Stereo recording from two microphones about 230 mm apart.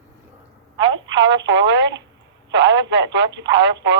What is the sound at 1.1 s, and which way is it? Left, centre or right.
Speech, right.